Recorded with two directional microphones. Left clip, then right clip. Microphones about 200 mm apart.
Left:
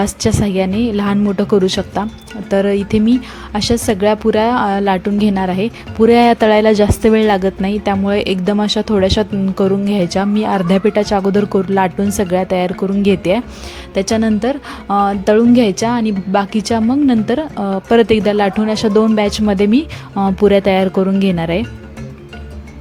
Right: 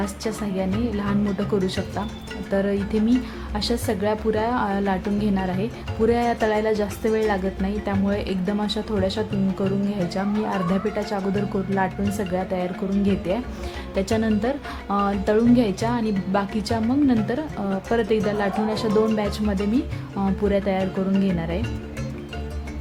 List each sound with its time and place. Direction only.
0.0 s a woman's voice: 35° left (ahead or behind)